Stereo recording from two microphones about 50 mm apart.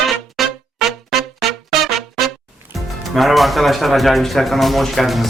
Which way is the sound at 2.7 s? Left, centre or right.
Centre.